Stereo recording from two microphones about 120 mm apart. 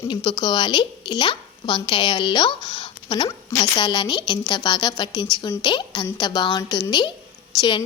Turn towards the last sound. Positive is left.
turn(degrees=40)  # may be behind; listen again after turning